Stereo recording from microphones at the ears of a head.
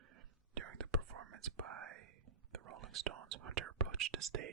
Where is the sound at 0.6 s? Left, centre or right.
Right.